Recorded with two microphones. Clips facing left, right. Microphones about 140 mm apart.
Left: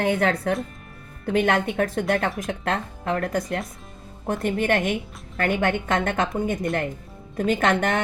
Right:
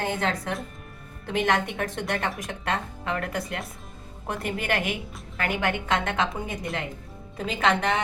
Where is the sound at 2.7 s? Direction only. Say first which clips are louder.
Left 2 dB; 40° left (ahead or behind).